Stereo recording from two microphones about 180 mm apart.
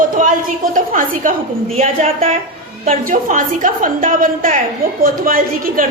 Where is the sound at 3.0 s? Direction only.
45° right (ahead or behind).